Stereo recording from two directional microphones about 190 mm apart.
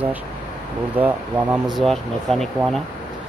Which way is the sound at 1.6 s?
Centre (ahead or behind).